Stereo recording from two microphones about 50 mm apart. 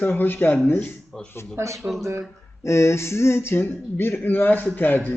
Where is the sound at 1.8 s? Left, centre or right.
Right.